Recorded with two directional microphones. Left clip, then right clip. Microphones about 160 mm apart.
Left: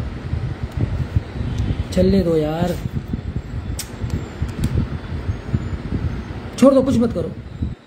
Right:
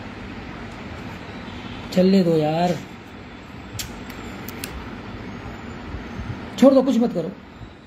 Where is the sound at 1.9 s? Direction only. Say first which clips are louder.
Left 1 dB; 5° left (ahead or behind).